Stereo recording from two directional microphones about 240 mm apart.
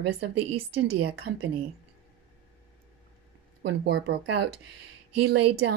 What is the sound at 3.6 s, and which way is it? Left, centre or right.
Speech, right.